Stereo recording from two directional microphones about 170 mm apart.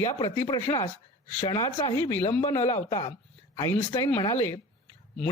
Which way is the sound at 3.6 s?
20° left (ahead or behind).